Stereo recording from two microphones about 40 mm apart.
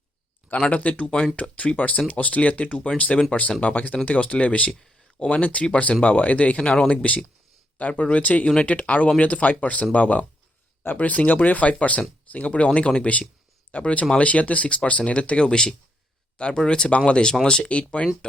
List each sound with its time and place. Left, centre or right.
0.4 s speech: left
4.7 s a sound: centre
5.3 s speech: left